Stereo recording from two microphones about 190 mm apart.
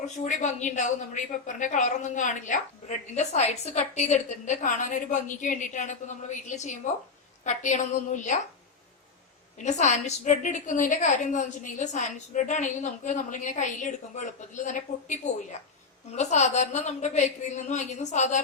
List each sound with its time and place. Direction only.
0.3 s a woman's voice: 40° left (ahead or behind)
9.6 s a woman's voice: 35° left (ahead or behind)